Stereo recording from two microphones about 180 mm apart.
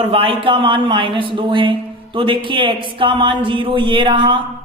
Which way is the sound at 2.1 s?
30° right (ahead or behind).